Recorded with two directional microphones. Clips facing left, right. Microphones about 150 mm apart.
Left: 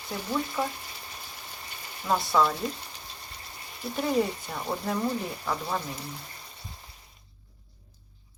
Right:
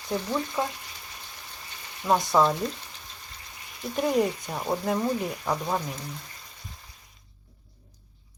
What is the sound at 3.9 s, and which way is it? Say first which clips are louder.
Speech: right 2 dB; 5° left (ahead or behind).